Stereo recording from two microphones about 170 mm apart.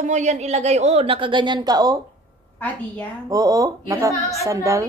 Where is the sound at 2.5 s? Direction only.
10° left (ahead or behind).